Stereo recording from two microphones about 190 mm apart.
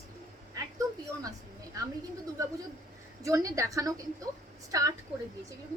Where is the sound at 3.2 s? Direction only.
15° right (ahead or behind).